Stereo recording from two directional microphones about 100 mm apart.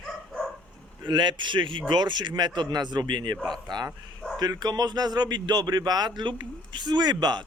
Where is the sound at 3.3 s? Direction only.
5° left (ahead or behind).